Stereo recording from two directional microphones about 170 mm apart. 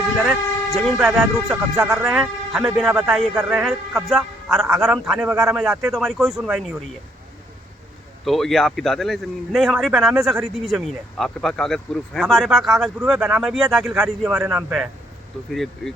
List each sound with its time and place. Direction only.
0.2 s a man's voice: centre (ahead or behind)
8.2 s a man's voice: centre (ahead or behind)